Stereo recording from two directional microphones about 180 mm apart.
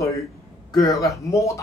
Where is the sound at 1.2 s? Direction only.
15° left (ahead or behind).